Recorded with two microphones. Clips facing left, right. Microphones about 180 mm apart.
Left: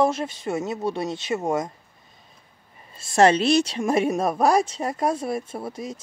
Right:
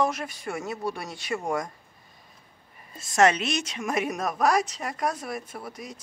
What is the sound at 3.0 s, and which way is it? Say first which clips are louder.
A woman's voice: left 4 dB; 30° left (ahead or behind).